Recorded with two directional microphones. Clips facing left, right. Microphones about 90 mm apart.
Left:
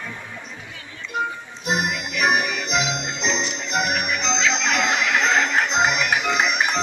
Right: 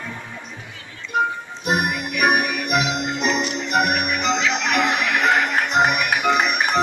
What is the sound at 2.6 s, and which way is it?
Music, 55° right (ahead or behind).